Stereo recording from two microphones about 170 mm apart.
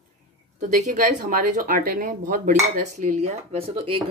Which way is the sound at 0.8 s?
50° right (ahead or behind).